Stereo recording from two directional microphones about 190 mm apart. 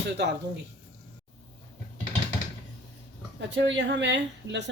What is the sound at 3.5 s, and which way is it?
Speech, 70° right (ahead or behind).